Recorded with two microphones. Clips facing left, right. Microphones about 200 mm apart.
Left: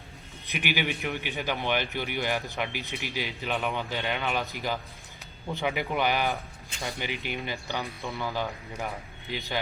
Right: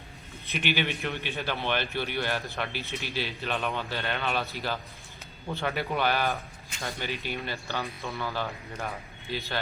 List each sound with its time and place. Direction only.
0.4 s a man's voice: 15° left (ahead or behind)